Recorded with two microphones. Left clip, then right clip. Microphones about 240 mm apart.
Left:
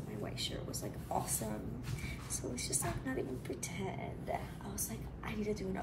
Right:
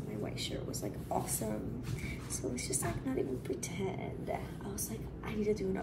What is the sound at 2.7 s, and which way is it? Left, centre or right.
A woman's voice, centre.